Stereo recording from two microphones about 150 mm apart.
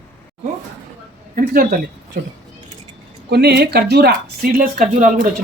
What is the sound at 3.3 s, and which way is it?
Speech, 90° right.